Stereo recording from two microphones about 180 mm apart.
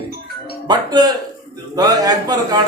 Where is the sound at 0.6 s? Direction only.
25° right (ahead or behind).